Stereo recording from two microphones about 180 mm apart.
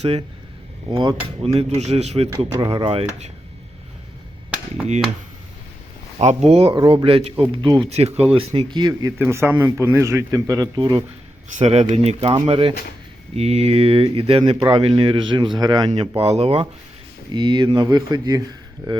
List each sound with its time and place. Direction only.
0.0 s speech: 35° right (ahead or behind)
6.1 s a man's voice: 35° right (ahead or behind)
11.5 s speech: 40° right (ahead or behind)
11.9 s speech: 30° right (ahead or behind)
15.9 s speech: 35° right (ahead or behind)